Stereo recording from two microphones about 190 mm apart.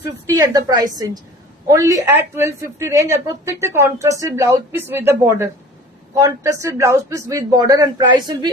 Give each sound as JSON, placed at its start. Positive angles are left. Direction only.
{"t": 0.3, "sound": "a woman's voice", "side_deg": -20}